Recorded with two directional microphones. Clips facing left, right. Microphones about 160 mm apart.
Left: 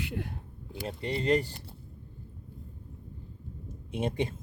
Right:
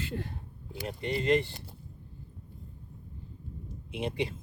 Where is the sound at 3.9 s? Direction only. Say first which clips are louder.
Left 2 dB; 45° left (ahead or behind).